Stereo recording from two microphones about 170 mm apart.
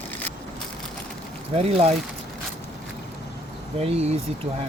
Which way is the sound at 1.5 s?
35° right (ahead or behind).